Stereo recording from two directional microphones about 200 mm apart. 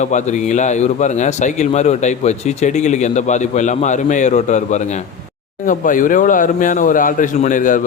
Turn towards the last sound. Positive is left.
turn(degrees=40)  # may be behind; listen again after turning